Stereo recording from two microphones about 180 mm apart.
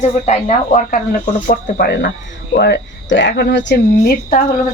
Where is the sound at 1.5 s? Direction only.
60° left (ahead or behind).